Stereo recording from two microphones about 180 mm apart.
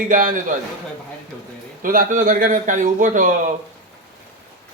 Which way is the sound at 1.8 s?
50° right (ahead or behind).